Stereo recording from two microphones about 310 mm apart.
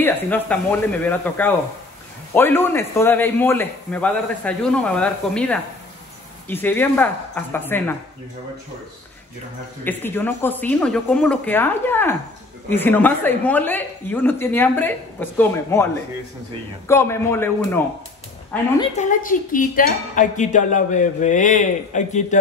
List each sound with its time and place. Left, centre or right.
0.0 s a woman's voice: centre
9.8 s a woman's voice: centre
18.8 s speech: left